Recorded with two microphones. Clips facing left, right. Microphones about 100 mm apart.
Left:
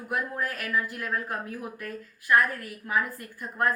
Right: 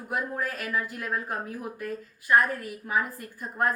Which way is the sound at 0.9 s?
15° right (ahead or behind).